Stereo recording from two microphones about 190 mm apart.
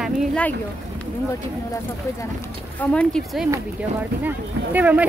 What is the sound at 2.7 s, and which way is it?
Speech, 5° left (ahead or behind).